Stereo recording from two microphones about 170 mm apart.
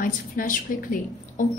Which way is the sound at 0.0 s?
55° left (ahead or behind).